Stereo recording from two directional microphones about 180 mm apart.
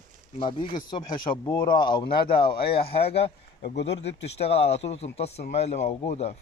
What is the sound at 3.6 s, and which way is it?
Speech, 70° left (ahead or behind).